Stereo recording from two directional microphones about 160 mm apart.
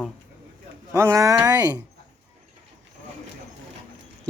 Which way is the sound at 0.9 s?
20° right (ahead or behind).